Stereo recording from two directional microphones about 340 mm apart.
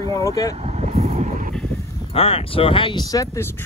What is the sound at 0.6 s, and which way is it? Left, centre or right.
Vehicle, centre.